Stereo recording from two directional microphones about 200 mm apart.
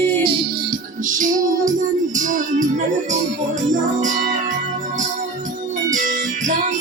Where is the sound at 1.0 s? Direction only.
40° right (ahead or behind).